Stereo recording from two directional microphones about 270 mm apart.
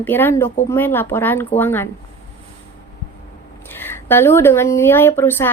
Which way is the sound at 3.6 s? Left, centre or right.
Centre.